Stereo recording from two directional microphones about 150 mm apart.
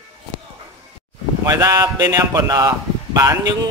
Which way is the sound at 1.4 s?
25° right (ahead or behind).